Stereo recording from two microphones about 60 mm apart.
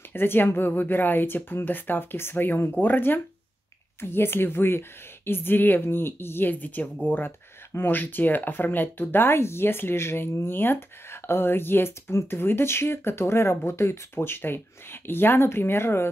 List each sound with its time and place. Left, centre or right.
0.1 s speech: left